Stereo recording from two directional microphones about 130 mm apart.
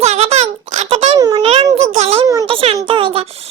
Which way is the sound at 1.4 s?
50° right (ahead or behind).